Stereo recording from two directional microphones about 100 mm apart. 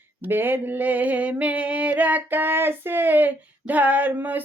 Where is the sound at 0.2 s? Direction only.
20° right (ahead or behind).